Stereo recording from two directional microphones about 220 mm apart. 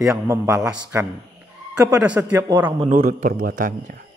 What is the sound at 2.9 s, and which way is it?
A man's voice, 35° right (ahead or behind).